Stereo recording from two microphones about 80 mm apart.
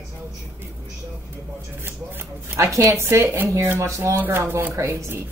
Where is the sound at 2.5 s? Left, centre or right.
Right.